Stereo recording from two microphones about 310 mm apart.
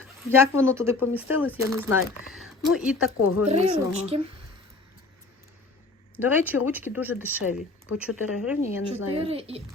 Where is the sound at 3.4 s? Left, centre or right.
Centre.